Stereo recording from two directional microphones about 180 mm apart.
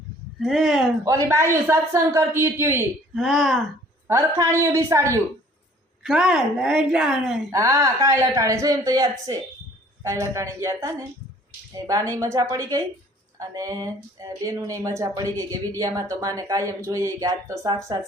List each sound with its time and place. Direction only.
0.3 s a woman's voice: centre (ahead or behind)
1.0 s speech: 15° right (ahead or behind)
3.2 s a woman's voice: centre (ahead or behind)
4.1 s speech: 15° right (ahead or behind)
6.0 s a woman's voice: 5° right (ahead or behind)
7.5 s speech: 15° right (ahead or behind)